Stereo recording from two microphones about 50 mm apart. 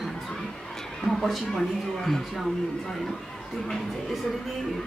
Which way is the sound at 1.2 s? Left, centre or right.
Centre.